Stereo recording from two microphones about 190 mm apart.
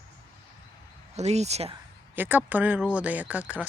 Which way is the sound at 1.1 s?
35° right (ahead or behind).